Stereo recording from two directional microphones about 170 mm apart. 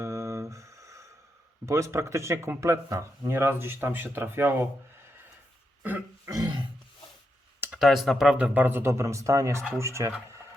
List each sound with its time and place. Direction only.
0.0 s a sound: 15° right (ahead or behind)
1.6 s speech: 15° right (ahead or behind)
5.8 s grunt: 15° right (ahead or behind)
7.6 s speech: 5° right (ahead or behind)